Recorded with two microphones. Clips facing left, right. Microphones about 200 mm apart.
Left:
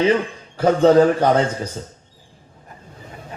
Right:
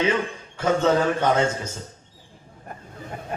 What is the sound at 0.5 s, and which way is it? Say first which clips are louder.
Speech: left 7 dB; 35° left (ahead or behind).